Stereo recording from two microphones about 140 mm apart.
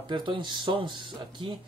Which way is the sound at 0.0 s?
35° right (ahead or behind).